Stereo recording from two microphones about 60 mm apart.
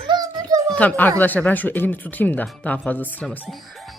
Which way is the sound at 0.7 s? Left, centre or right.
Left.